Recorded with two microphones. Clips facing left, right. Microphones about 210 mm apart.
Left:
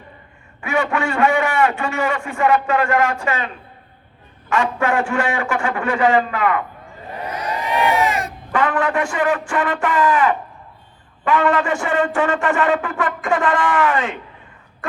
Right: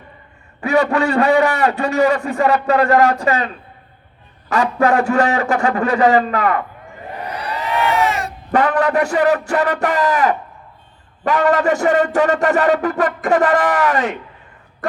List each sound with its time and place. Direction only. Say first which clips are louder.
0.6 s a man's voice: right 5 dB; 35° right (ahead or behind)
7.6 s a sound: right 1 dB; 15° left (ahead or behind)
8.5 s a man's voice: right 4 dB; 40° right (ahead or behind)